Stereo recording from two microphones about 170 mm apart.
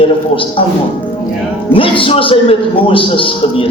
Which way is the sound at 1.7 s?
30° left (ahead or behind).